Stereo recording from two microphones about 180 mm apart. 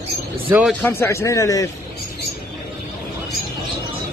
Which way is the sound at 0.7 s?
10° left (ahead or behind).